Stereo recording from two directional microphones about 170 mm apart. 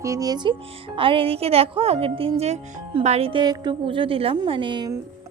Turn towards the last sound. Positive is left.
turn(degrees=-30)  # may be behind; listen again after turning